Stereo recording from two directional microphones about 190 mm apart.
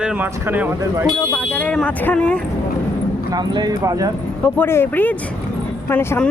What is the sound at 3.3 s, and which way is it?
Speech, 20° right (ahead or behind).